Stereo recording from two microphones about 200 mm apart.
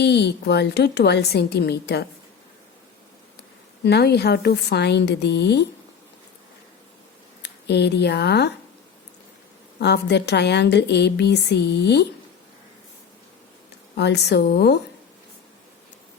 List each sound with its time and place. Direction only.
0.0 s a woman's voice: 55° left (ahead or behind)
3.8 s a woman's voice: 55° left (ahead or behind)
7.4 s speech: 60° left (ahead or behind)
9.7 s a woman's voice: 55° left (ahead or behind)
13.9 s a woman's voice: 60° left (ahead or behind)